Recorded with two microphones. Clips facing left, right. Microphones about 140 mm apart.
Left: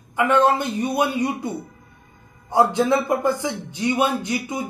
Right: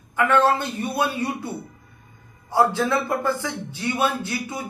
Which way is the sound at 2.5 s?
20° left (ahead or behind).